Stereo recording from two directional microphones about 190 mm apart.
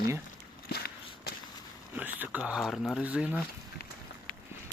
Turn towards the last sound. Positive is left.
turn(degrees=-5)  # may be behind; listen again after turning